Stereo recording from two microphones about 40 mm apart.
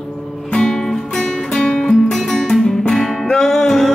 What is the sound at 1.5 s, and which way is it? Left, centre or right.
Music, left.